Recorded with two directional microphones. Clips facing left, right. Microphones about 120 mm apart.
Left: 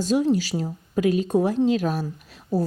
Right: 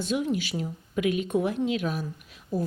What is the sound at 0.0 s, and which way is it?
Speech, 35° left (ahead or behind).